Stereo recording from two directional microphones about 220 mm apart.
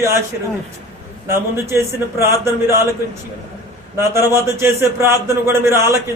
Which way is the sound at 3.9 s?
10° right (ahead or behind).